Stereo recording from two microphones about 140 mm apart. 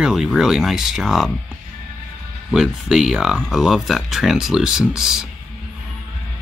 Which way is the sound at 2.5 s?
5° right (ahead or behind).